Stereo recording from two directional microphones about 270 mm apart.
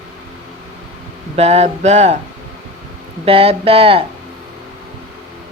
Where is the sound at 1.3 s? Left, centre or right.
Right.